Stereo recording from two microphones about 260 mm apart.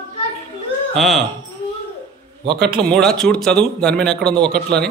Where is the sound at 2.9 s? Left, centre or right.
Centre.